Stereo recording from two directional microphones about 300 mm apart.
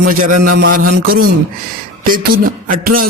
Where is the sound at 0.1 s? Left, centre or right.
Right.